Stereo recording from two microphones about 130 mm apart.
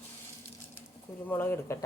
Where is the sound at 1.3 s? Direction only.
15° left (ahead or behind).